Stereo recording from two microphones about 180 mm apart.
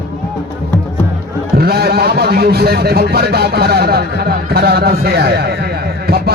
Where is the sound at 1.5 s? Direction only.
60° right (ahead or behind).